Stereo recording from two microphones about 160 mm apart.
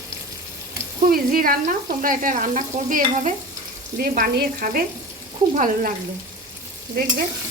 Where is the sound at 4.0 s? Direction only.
65° right (ahead or behind).